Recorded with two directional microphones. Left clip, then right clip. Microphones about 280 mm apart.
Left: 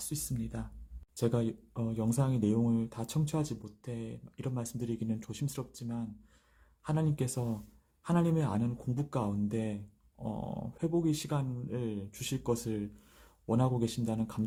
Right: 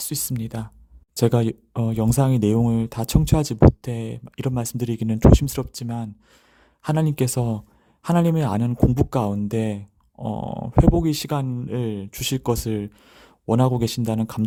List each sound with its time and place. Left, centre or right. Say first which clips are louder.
0.1 s speech: right 11 dB; right